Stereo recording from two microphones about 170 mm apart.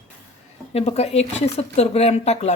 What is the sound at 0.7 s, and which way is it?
A woman's voice, 40° left (ahead or behind).